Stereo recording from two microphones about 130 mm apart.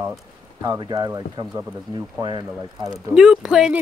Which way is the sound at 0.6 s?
30° right (ahead or behind).